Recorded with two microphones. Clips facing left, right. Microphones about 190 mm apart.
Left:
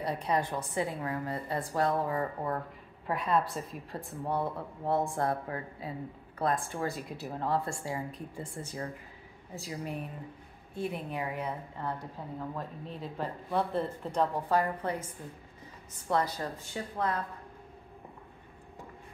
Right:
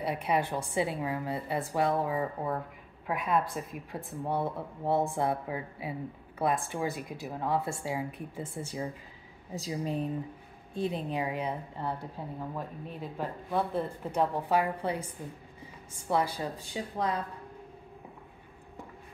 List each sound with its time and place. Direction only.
0.0 s speech: 10° right (ahead or behind)
9.5 s a woman's voice: 25° right (ahead or behind); by 15.0 s 10° right (ahead or behind)
16.0 s speech: 10° right (ahead or behind)